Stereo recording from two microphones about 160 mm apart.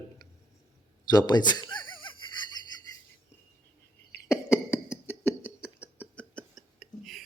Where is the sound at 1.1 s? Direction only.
25° left (ahead or behind).